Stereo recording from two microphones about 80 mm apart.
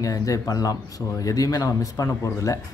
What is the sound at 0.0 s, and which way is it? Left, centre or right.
Speech, left.